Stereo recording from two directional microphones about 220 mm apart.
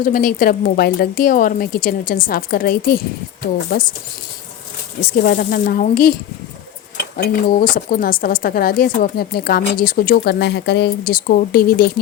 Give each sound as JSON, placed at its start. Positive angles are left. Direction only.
{"t": 0.0, "sound": "a woman's voice", "side_deg": 40}
{"t": 5.0, "sound": "a woman's voice", "side_deg": 40}
{"t": 7.4, "sound": "a woman's voice", "side_deg": 40}